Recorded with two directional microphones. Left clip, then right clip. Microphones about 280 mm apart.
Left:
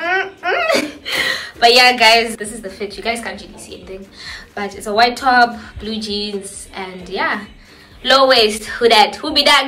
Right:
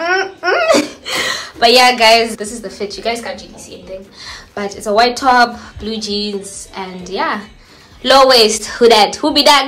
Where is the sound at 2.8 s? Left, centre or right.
Centre.